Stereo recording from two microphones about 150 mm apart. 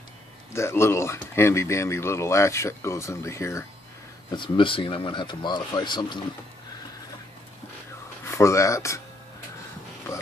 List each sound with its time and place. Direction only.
0.5 s speech: 20° left (ahead or behind)
4.3 s speech: 35° left (ahead or behind)
8.3 s speech: 20° left (ahead or behind)